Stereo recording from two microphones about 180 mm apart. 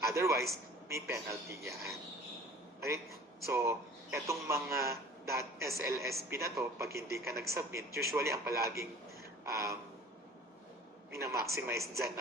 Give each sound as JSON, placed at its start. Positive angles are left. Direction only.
{"t": 0.0, "sound": "a man's voice", "side_deg": -15}
{"t": 9.4, "sound": "a sound", "side_deg": -15}
{"t": 11.1, "sound": "a man's voice", "side_deg": -15}